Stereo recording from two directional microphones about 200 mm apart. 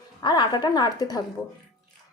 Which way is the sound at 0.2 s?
20° left (ahead or behind).